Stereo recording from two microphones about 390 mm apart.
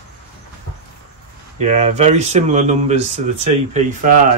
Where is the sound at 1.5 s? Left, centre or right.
Centre.